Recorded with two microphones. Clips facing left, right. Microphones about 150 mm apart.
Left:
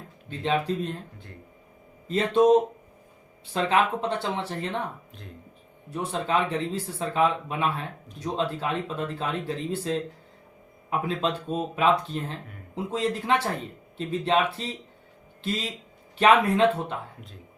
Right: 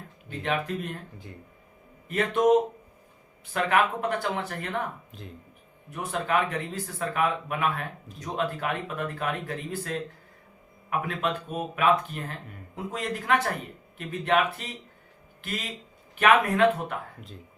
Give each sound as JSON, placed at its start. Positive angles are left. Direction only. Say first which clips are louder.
{"t": 0.3, "sound": "speech", "louder": "left 3 dB", "side_deg": 25}
{"t": 2.0, "sound": "speech", "louder": "left 2 dB", "side_deg": 25}
{"t": 5.9, "sound": "speech", "louder": "left 1 dB", "side_deg": 30}
{"t": 16.1, "sound": "speech", "louder": "left 2 dB", "side_deg": 25}